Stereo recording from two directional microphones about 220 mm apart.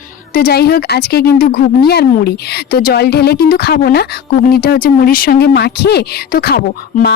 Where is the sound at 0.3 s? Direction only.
45° left (ahead or behind).